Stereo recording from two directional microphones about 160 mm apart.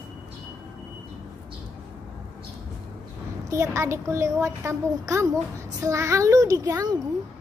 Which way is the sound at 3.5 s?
20° right (ahead or behind).